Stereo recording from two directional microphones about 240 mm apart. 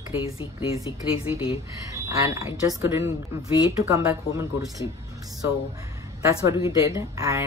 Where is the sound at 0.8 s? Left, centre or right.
Left.